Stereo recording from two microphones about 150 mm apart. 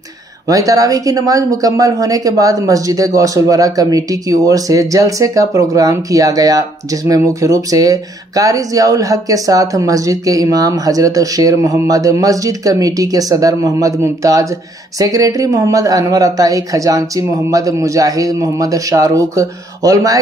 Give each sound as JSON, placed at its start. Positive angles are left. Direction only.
{"t": 0.5, "sound": "speech", "side_deg": -25}